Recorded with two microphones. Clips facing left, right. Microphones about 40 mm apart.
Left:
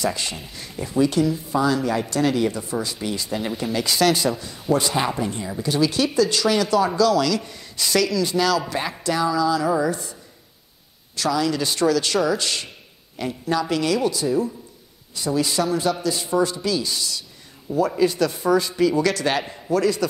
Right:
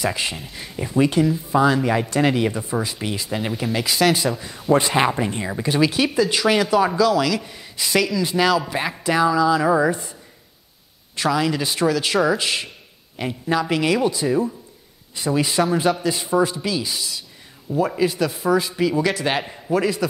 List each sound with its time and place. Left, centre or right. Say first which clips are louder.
0.0 s speech: right 1 dB; centre
4.4 s speech: right 3 dB; centre
4.7 s speech: right 4 dB; right
5.9 s speech: right 1 dB; centre
11.1 s speech: right 1 dB; right